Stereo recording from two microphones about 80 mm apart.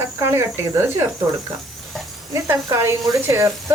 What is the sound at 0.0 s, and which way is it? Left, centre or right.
Speech, right.